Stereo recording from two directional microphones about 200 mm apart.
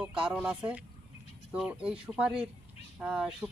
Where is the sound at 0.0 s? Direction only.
5° right (ahead or behind).